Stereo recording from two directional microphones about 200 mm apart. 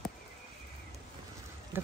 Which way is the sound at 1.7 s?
10° right (ahead or behind).